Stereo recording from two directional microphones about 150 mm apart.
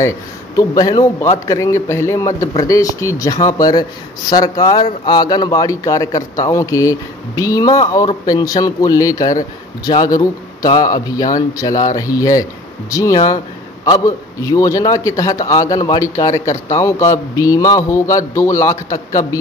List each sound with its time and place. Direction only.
0.6 s a man's voice: 25° left (ahead or behind)